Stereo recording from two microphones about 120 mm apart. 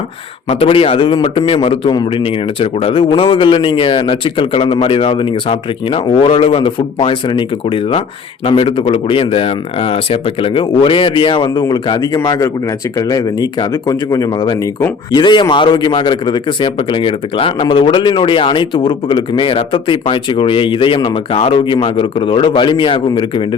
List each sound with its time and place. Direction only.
0.4 s speech: 55° left (ahead or behind)